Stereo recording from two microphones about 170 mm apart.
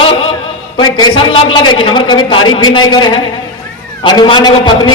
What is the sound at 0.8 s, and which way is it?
A man's voice, 25° left (ahead or behind).